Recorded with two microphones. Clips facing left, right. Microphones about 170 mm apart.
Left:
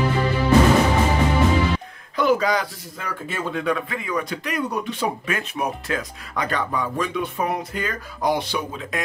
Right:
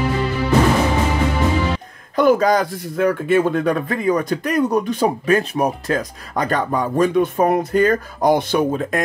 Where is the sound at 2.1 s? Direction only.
45° right (ahead or behind).